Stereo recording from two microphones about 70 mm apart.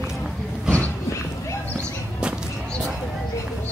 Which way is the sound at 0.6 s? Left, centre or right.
Left.